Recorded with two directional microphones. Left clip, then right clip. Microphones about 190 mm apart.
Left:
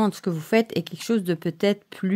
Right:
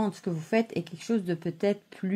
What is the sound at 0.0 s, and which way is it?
Speech, 45° left (ahead or behind).